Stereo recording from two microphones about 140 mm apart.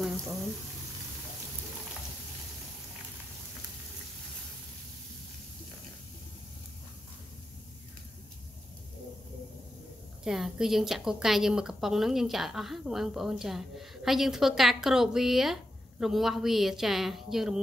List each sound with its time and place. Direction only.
10.2 s speech: 5° right (ahead or behind)